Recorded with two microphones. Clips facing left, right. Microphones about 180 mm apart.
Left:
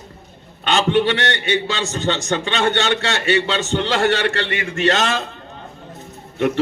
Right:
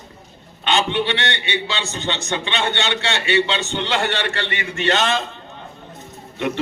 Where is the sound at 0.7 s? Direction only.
45° left (ahead or behind).